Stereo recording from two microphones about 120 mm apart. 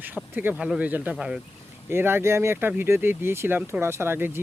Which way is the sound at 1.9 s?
20° right (ahead or behind).